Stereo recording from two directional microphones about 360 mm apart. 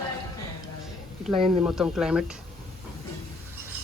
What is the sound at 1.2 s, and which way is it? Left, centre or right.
A man's voice, centre.